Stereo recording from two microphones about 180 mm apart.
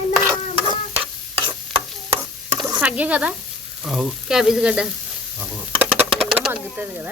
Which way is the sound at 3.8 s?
Centre (ahead or behind).